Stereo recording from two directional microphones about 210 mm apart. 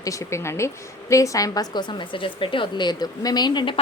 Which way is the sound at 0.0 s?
15° left (ahead or behind).